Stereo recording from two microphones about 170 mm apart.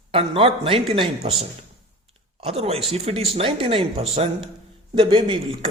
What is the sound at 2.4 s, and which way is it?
A man's voice, 35° right (ahead or behind).